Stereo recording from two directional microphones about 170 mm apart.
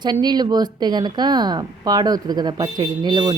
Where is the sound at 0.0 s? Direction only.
25° right (ahead or behind).